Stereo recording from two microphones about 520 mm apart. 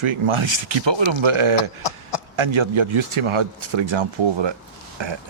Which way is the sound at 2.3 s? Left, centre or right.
Right.